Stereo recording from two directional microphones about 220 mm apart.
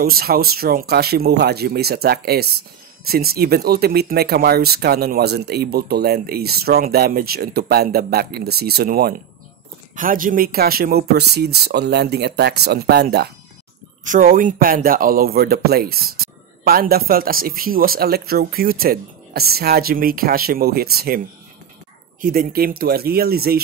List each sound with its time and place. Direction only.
0.0 s speech: 45° right (ahead or behind)
22.2 s speech: 40° right (ahead or behind)